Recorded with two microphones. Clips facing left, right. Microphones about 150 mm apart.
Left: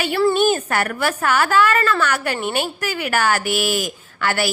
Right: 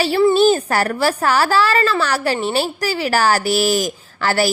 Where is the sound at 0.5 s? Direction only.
35° right (ahead or behind).